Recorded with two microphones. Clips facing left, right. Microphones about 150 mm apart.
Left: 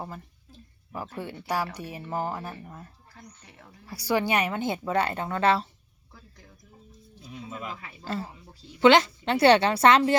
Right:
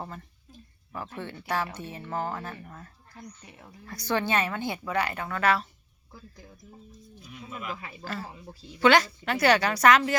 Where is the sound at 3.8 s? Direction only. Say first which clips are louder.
Left 2 dB; 10° left (ahead or behind); by 5.7 s 25° left (ahead or behind).